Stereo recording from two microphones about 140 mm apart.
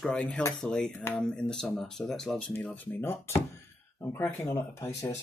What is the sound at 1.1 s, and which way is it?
Speech, 5° left (ahead or behind).